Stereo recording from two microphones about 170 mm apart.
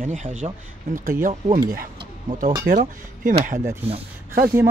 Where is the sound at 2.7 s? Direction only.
55° right (ahead or behind).